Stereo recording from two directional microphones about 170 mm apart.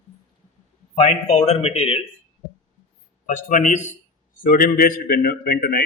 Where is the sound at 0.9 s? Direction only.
40° left (ahead or behind).